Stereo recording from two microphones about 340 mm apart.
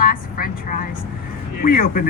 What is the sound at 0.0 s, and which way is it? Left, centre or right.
Vehicle, left.